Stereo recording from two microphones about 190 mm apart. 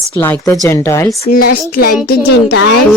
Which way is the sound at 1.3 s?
55° left (ahead or behind).